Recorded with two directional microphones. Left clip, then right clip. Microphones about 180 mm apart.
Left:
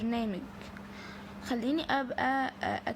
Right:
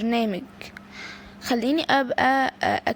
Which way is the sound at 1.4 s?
45° right (ahead or behind).